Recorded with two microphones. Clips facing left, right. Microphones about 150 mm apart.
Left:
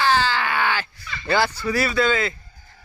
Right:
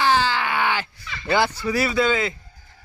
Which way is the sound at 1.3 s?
15° right (ahead or behind).